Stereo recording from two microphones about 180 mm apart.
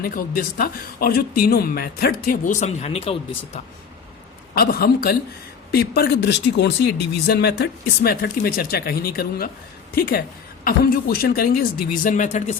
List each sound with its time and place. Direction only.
0.0 s speech: 55° left (ahead or behind); by 3.6 s 35° left (ahead or behind)
4.5 s speech: 55° left (ahead or behind)